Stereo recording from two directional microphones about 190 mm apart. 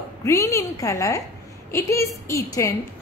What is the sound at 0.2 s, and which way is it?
A woman's voice, 15° left (ahead or behind).